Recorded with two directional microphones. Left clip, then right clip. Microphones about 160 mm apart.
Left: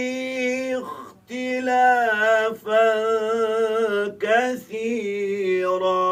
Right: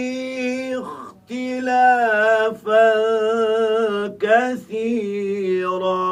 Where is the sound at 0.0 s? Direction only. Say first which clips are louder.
Even; 35° right (ahead or behind).